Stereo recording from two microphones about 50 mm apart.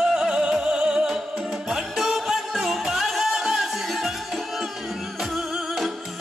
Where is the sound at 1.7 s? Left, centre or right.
Centre.